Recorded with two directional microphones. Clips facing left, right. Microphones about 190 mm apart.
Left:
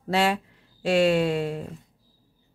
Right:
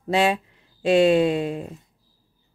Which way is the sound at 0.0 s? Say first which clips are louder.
Right 3 dB; 20° right (ahead or behind).